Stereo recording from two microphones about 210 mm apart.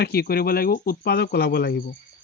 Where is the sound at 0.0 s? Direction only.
50° left (ahead or behind).